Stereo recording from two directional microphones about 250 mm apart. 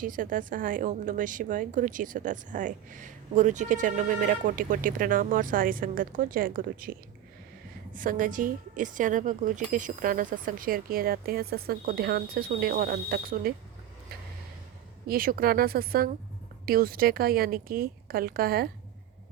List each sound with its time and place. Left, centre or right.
0.0 s a woman's voice: right
7.9 s a woman's voice: right
15.0 s a woman's voice: right